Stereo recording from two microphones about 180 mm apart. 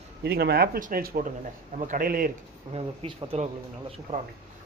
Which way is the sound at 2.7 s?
35° right (ahead or behind).